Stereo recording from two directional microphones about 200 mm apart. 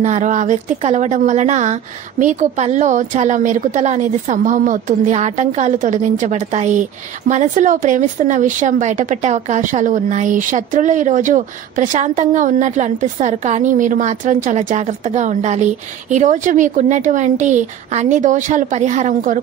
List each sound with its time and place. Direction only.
0.0 s a woman's voice: 35° right (ahead or behind)